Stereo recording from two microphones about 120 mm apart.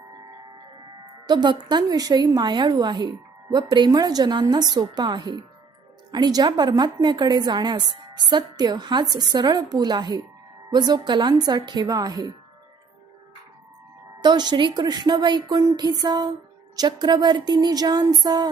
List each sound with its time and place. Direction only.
1.3 s a woman's voice: 35° right (ahead or behind)
14.2 s a woman's voice: 35° right (ahead or behind)